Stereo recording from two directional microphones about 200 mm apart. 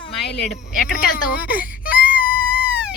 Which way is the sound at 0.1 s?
Centre (ahead or behind).